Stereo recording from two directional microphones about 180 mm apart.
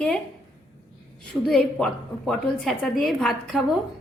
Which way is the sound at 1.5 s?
5° left (ahead or behind).